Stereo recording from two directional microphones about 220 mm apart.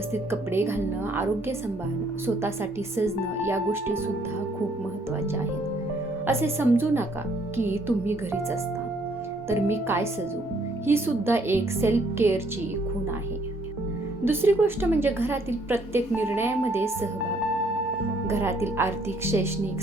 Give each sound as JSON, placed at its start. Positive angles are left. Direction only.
{"t": 0.1, "sound": "a woman's voice", "side_deg": -10}
{"t": 2.9, "sound": "a woman's voice", "side_deg": -10}
{"t": 6.2, "sound": "a woman's voice", "side_deg": -10}
{"t": 9.5, "sound": "a woman's voice", "side_deg": -10}
{"t": 14.3, "sound": "a woman's voice", "side_deg": -10}
{"t": 18.3, "sound": "a woman's voice", "side_deg": -10}